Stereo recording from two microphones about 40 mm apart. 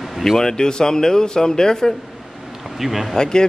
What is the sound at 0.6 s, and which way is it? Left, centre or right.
Speech, centre.